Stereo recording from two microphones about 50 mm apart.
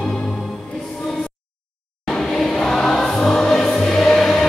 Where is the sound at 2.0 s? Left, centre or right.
Centre.